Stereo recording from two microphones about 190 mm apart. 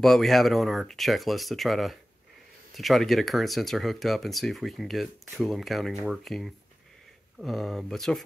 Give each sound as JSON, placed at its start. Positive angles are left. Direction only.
{"t": 0.0, "sound": "speech", "side_deg": 0}